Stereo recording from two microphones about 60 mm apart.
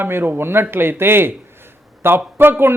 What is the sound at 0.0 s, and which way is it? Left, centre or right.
Speech, right.